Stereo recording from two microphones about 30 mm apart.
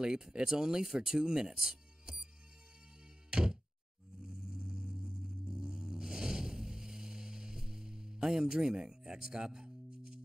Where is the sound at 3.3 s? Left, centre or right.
Right.